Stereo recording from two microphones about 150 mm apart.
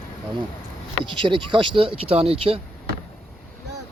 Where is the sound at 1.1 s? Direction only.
35° right (ahead or behind).